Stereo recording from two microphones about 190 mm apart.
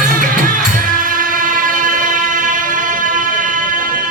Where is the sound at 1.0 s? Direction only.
45° right (ahead or behind).